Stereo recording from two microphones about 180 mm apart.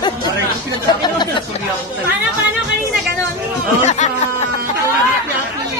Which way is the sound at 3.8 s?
40° left (ahead or behind).